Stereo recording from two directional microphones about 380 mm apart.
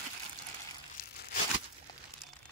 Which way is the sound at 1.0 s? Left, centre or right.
Left.